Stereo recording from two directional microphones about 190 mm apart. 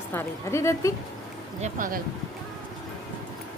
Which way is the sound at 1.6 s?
45° right (ahead or behind).